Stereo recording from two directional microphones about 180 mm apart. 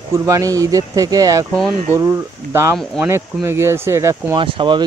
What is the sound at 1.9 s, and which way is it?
Speech, 15° right (ahead or behind).